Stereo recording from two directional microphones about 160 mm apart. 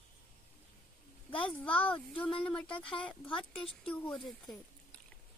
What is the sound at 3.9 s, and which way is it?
Speech, 10° left (ahead or behind).